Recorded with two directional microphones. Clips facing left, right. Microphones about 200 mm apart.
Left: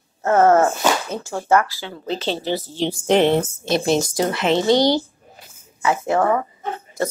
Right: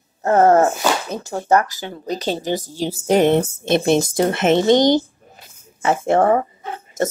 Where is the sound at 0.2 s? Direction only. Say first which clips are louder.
Right 1 dB; 35° right (ahead or behind).